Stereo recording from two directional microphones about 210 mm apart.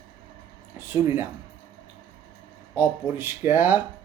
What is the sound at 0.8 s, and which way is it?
Speech, 10° right (ahead or behind).